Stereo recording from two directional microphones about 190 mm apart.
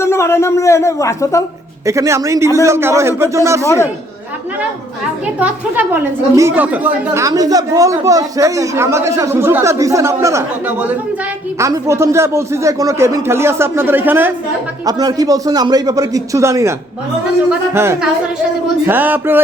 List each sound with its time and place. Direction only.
0.0 s speech: 15° left (ahead or behind)
1.9 s a woman's voice: 15° right (ahead or behind)
5.2 s a woman's voice: 10° right (ahead or behind)